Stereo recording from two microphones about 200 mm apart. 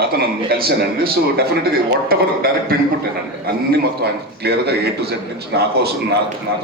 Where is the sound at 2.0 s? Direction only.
50° right (ahead or behind).